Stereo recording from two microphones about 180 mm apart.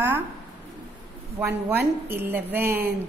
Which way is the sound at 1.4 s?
10° right (ahead or behind).